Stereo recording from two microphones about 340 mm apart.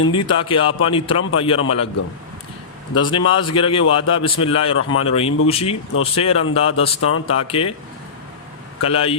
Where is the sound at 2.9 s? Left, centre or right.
Centre.